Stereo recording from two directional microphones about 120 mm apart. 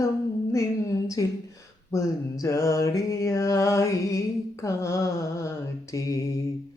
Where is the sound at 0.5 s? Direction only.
25° left (ahead or behind).